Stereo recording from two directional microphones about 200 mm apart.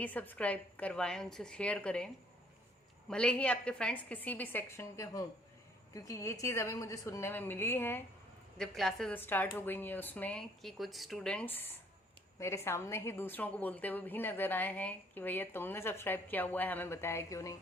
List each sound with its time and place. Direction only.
0.0 s a woman's voice: 10° left (ahead or behind)
3.1 s a woman's voice: 5° left (ahead or behind)